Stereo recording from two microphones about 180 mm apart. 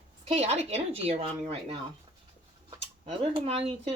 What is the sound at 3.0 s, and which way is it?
Speech, 35° right (ahead or behind).